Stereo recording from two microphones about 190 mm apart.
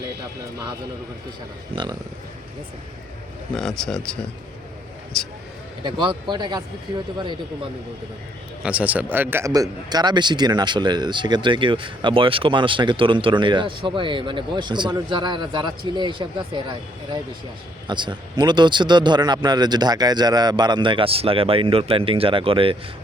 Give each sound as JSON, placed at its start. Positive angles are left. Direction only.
{"t": 1.7, "sound": "a man's voice", "side_deg": -25}
{"t": 3.5, "sound": "speech", "side_deg": 0}
{"t": 5.8, "sound": "a man's voice", "side_deg": -25}
{"t": 8.6, "sound": "a man's voice", "side_deg": -5}